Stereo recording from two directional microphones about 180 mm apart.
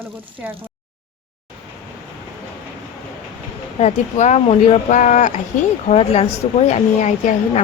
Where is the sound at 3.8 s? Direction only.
40° left (ahead or behind).